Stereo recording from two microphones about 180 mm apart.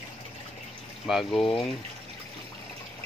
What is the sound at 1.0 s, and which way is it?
Speech, centre (ahead or behind).